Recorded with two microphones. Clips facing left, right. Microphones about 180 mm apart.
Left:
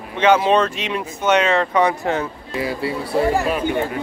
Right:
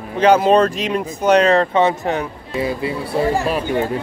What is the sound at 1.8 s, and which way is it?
A man's voice, 20° right (ahead or behind).